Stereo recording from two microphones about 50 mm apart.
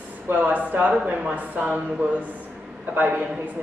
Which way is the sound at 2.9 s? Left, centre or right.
Right.